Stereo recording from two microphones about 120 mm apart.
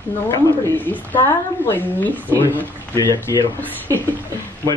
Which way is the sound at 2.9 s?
25° left (ahead or behind).